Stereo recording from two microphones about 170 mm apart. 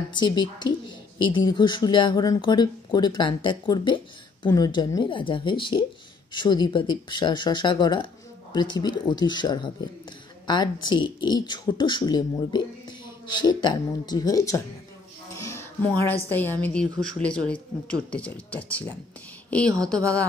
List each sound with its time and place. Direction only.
0.1 s speech: 25° left (ahead or behind)
15.3 s music: 15° left (ahead or behind)
16.3 s speech: 10° left (ahead or behind)